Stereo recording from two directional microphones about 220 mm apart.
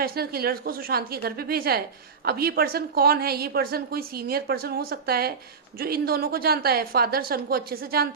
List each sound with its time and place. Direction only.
0.0 s a woman's voice: 45° right (ahead or behind)